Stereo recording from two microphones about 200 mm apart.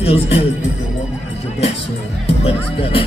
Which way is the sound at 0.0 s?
30° left (ahead or behind).